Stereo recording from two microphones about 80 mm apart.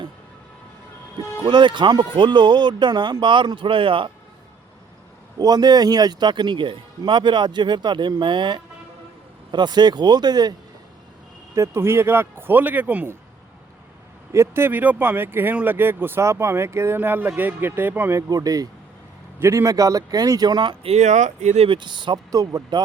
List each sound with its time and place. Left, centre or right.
1.5 s speech: right
5.4 s speech: right
11.5 s speech: right
14.3 s speech: right
18.1 s speech: right
19.4 s a man's voice: right
19.6 s speech: right
21.7 s speech: right
22.3 s speech: right